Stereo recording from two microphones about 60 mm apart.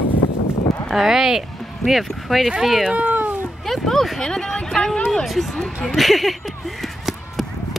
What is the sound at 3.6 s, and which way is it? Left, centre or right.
Speech, centre.